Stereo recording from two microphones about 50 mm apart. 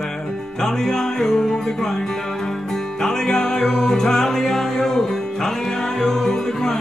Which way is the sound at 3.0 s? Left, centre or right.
Centre.